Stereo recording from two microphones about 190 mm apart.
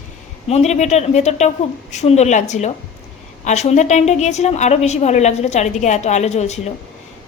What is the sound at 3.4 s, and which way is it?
A woman's voice, 35° left (ahead or behind).